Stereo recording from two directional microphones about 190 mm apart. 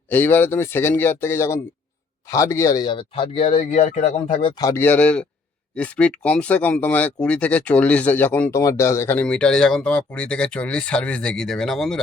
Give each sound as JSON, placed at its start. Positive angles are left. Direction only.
{"t": 0.1, "sound": "speech", "side_deg": 10}
{"t": 4.5, "sound": "speech", "side_deg": 15}